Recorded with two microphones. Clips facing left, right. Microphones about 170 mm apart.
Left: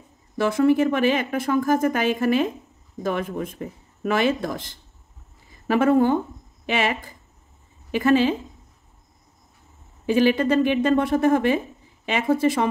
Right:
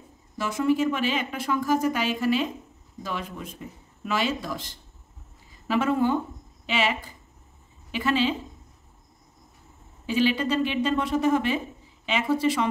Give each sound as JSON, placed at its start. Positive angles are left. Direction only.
{"t": 0.4, "sound": "speech", "side_deg": 55}
{"t": 10.0, "sound": "speech", "side_deg": 50}